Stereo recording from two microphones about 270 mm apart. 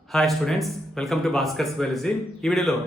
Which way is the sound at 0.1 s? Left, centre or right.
Centre.